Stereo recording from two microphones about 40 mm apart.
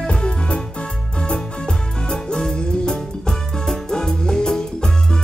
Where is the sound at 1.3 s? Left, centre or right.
Centre.